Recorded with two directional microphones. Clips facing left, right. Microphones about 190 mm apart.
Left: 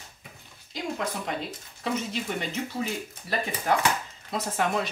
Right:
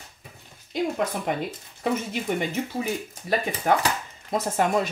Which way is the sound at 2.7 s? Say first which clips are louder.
Right 3 dB; 50° right (ahead or behind).